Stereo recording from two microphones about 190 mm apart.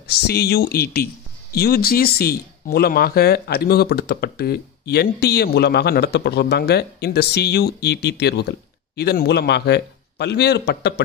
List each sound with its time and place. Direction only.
0.0 s speech: 60° left (ahead or behind)